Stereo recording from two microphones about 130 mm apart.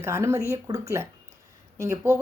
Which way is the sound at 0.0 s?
20° right (ahead or behind).